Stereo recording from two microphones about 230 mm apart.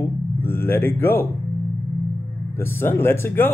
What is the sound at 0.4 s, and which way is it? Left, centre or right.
Speech, centre.